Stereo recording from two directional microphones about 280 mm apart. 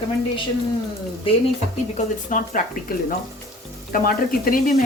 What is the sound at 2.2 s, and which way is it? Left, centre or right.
Speech, left.